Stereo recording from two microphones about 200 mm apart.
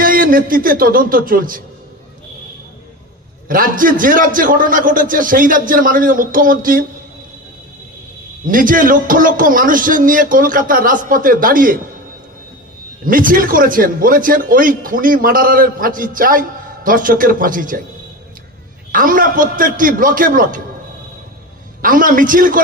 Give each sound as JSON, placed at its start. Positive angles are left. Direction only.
{"t": 0.0, "sound": "a man's voice", "side_deg": -45}
{"t": 3.4, "sound": "a man's voice", "side_deg": -45}
{"t": 8.5, "sound": "a man's voice", "side_deg": -45}
{"t": 13.0, "sound": "a man's voice", "side_deg": -45}
{"t": 18.9, "sound": "a man's voice", "side_deg": -45}
{"t": 21.8, "sound": "a man's voice", "side_deg": -45}